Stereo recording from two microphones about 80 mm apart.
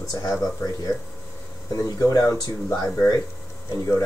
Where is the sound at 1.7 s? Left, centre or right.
Left.